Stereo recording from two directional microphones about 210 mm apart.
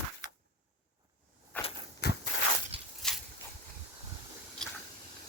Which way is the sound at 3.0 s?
Centre (ahead or behind).